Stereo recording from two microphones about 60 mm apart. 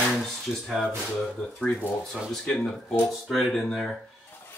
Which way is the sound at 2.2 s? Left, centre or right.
Centre.